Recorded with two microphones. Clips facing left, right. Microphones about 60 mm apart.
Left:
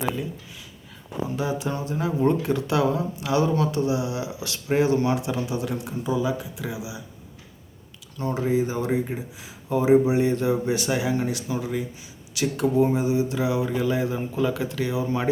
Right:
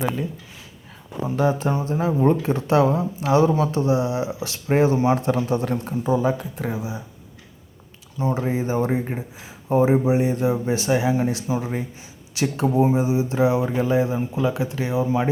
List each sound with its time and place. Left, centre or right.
1.4 s speech: right
5.1 s speech: right
8.4 s speech: right
10.0 s speech: right
14.2 s speech: centre
14.5 s speech: right